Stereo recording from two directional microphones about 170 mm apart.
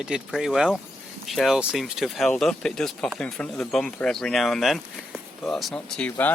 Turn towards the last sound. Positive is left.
turn(degrees=10)  # may be behind; listen again after turning